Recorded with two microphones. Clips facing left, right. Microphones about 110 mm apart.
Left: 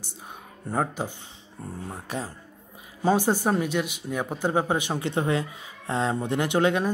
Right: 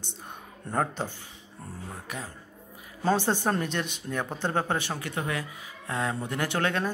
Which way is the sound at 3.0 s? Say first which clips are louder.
Left 3 dB; 10° left (ahead or behind).